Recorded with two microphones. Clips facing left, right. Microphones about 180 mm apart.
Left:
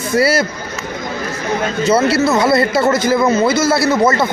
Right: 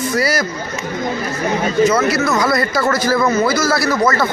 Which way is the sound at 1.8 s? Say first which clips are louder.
Left 2 dB; 30° left (ahead or behind).